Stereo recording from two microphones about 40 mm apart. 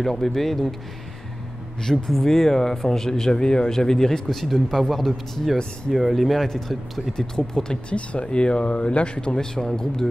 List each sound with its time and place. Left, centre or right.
0.0 s speech: centre
1.8 s speech: centre
7.9 s speech: left
9.3 s speech: centre